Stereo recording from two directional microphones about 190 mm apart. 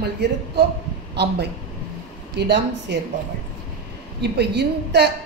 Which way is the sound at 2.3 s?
65° right (ahead or behind).